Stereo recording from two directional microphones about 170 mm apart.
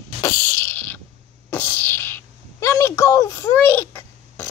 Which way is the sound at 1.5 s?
10° left (ahead or behind).